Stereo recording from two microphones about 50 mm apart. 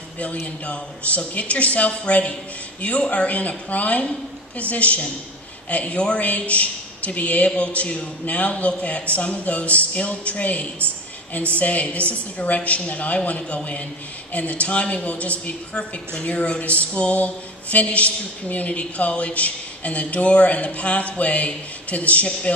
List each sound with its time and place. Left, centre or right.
0.2 s speech: left